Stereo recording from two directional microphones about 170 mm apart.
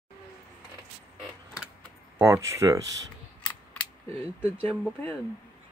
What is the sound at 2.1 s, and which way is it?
Speech, 15° right (ahead or behind).